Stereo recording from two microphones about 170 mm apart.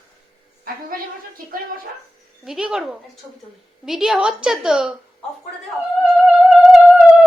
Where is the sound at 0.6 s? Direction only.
60° right (ahead or behind).